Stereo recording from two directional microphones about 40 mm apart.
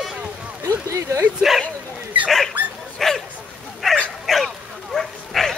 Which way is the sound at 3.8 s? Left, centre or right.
Centre.